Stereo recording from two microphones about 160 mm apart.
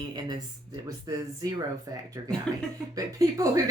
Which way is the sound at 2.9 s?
20° right (ahead or behind).